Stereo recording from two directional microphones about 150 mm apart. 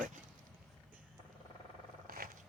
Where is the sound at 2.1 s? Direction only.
75° right (ahead or behind).